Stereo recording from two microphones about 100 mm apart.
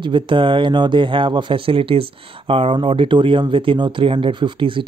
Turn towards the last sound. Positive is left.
turn(degrees=-55)  # may be behind; listen again after turning